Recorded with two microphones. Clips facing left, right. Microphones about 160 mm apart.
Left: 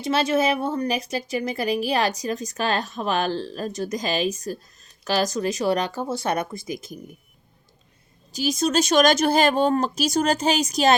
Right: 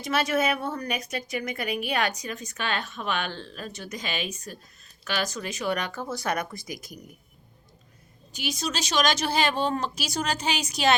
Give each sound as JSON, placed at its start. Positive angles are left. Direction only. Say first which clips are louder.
{"t": 0.0, "sound": "speech", "louder": "left 4 dB", "side_deg": 30}
{"t": 8.3, "sound": "speech", "louder": "left 9 dB", "side_deg": 40}